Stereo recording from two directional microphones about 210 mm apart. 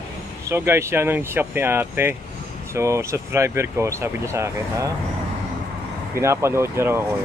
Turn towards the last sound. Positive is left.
turn(degrees=-10)  # may be behind; listen again after turning